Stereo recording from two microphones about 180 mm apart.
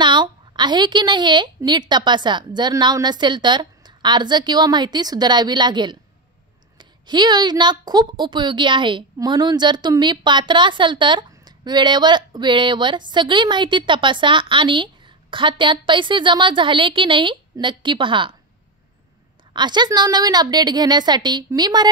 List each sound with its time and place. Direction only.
0.0 s a woman's voice: 25° right (ahead or behind)
19.5 s a woman's voice: 25° right (ahead or behind)